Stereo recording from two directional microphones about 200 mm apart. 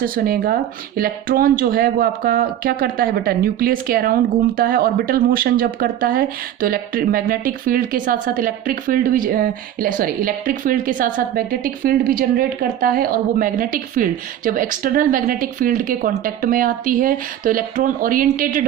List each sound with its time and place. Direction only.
0.0 s speech: 45° right (ahead or behind)